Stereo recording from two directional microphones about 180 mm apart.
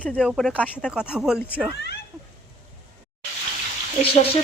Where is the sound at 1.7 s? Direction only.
65° left (ahead or behind).